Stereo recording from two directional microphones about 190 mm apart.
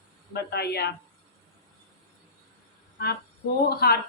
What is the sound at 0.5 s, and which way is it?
Speech, 60° left (ahead or behind).